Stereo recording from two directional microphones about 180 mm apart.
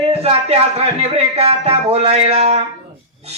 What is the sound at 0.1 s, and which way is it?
A man's voice, 35° right (ahead or behind).